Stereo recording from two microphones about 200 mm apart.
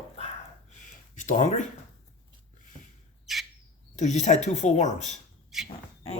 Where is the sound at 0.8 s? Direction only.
40° left (ahead or behind).